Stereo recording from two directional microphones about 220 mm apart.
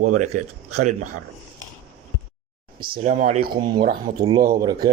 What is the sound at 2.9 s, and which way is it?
Speech, 35° right (ahead or behind).